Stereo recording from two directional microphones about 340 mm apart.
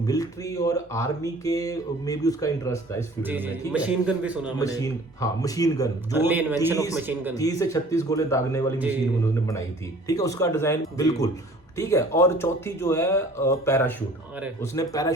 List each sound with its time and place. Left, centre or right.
0.0 s speech: centre
3.2 s a man's voice: centre
4.5 s speech: centre
6.1 s a man's voice: centre
7.3 s speech: centre